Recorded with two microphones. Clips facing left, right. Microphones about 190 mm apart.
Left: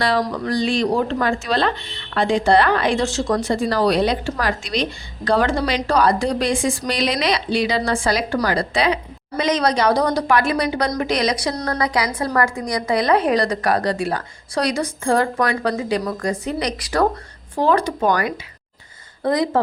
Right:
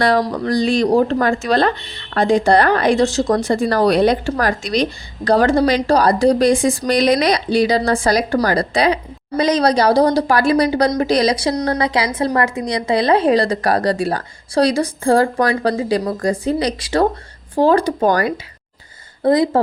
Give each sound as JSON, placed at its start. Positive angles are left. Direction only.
{"t": 0.2, "sound": "speech", "side_deg": -35}